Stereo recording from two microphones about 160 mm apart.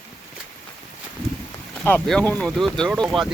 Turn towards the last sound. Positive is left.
turn(degrees=0)  # may be behind; listen again after turning